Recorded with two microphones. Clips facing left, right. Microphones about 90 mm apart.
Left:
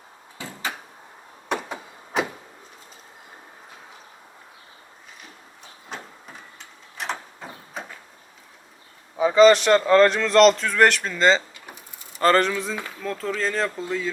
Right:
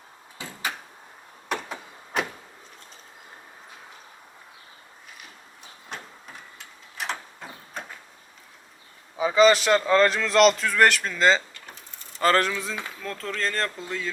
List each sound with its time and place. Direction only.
0.4 s door: 20° left (ahead or behind)
1.5 s a sound: 10° left (ahead or behind)
5.9 s printer: centre (ahead or behind)
9.1 s a man's voice: centre (ahead or behind)
11.5 s a sound: 10° left (ahead or behind)
12.2 s a man's voice: centre (ahead or behind)